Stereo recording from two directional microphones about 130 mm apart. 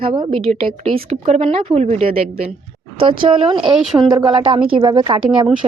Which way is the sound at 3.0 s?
45° right (ahead or behind).